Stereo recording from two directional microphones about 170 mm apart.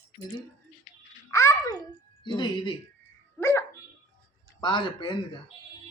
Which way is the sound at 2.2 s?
25° left (ahead or behind).